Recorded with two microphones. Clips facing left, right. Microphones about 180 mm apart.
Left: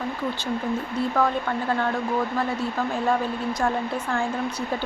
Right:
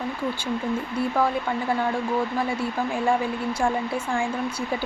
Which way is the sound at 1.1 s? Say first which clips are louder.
Left 1 dB; 10° right (ahead or behind).